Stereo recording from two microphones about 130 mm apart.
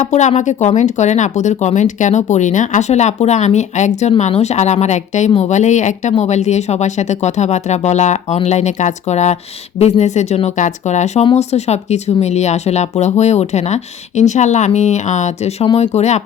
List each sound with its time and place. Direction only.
0.0 s speech: 65° left (ahead or behind)
15.6 s speech: 50° left (ahead or behind)